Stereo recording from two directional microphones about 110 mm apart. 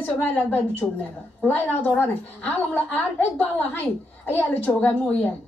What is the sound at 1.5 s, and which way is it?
A woman's voice, 15° left (ahead or behind).